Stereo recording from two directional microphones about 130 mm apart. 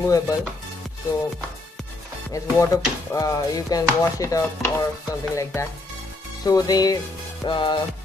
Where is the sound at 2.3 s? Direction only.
25° left (ahead or behind).